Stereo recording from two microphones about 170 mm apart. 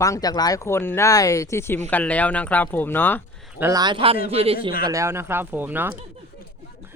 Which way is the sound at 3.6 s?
20° right (ahead or behind).